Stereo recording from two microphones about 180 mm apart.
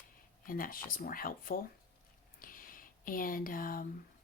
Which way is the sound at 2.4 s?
50° left (ahead or behind).